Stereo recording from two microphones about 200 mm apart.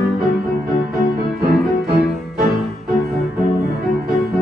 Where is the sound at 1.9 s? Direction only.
50° right (ahead or behind).